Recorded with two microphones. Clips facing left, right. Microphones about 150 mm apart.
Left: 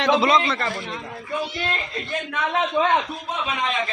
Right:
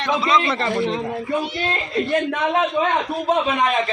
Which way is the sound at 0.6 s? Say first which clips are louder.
Right 7 dB; 25° right (ahead or behind).